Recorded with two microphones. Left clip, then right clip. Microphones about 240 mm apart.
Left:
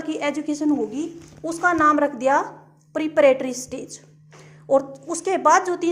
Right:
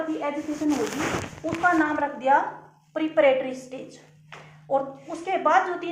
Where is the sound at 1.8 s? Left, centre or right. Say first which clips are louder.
Left 5 dB; left.